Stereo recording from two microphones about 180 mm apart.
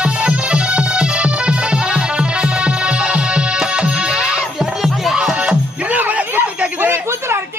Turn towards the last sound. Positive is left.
turn(degrees=-15)  # may be behind; listen again after turning